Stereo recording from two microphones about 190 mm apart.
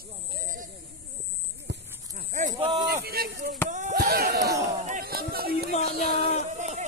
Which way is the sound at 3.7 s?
45° right (ahead or behind).